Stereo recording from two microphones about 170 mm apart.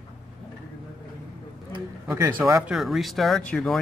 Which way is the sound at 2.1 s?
15° right (ahead or behind).